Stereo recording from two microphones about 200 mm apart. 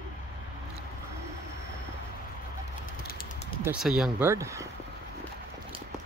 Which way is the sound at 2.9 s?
45° left (ahead or behind).